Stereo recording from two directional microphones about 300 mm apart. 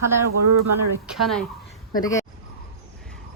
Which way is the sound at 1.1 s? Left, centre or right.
Centre.